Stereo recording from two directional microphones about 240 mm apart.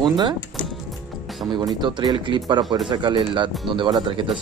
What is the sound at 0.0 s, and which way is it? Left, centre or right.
Speech, centre.